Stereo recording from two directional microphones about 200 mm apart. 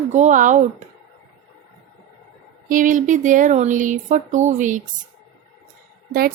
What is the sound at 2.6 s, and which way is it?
Speech, 40° right (ahead or behind).